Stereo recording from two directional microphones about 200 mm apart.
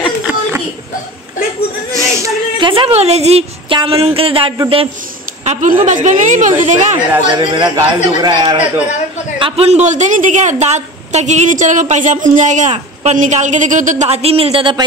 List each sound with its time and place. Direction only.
1.9 s a sound: 15° right (ahead or behind)
2.7 s speech: 30° right (ahead or behind)
5.4 s a woman's voice: 35° right (ahead or behind)
7.2 s a woman's voice: 25° right (ahead or behind)